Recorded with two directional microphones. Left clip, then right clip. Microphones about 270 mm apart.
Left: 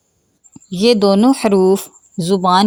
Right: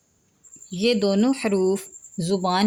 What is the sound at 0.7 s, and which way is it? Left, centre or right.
A woman's voice, left.